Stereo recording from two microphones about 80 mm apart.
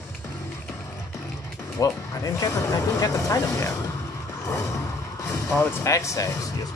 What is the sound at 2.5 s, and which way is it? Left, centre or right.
Speech, left.